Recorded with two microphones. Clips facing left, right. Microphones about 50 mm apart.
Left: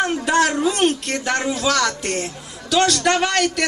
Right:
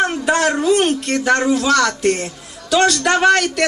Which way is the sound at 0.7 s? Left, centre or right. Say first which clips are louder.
Right 4 dB; centre.